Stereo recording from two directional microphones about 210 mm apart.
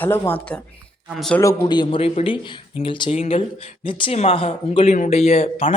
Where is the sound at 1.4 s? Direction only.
10° left (ahead or behind).